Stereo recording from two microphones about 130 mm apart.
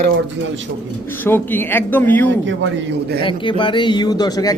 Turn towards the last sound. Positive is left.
turn(degrees=30)  # may be behind; listen again after turning